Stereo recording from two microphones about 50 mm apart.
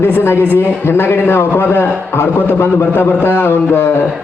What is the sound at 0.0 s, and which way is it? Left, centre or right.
A man's voice, left.